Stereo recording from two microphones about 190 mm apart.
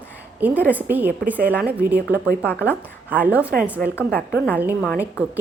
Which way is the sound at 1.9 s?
60° right (ahead or behind).